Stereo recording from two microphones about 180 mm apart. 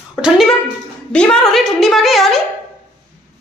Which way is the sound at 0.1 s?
Centre (ahead or behind).